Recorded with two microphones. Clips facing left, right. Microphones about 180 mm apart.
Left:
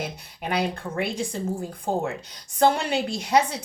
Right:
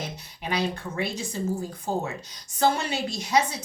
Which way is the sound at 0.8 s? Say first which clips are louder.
Left 3 dB; 55° left (ahead or behind).